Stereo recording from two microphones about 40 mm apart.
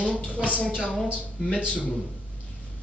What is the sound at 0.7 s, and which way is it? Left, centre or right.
Speech, centre.